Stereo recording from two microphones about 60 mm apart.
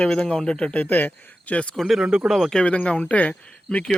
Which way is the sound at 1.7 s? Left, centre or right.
Centre.